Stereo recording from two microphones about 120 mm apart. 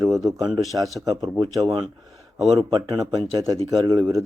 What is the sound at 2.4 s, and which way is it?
Speech, 35° right (ahead or behind).